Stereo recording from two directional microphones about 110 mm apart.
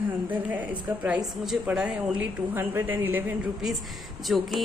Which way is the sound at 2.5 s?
20° right (ahead or behind).